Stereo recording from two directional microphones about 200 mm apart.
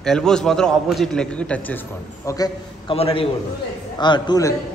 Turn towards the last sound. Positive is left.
turn(degrees=20)  # may be behind; listen again after turning